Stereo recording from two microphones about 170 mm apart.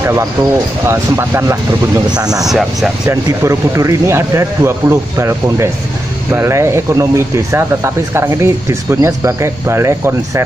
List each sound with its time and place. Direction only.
0.0 s speech: 15° right (ahead or behind)
2.4 s speech: centre (ahead or behind)
3.1 s speech: 15° right (ahead or behind)